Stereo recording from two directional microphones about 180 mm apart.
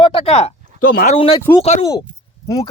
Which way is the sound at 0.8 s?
55° left (ahead or behind).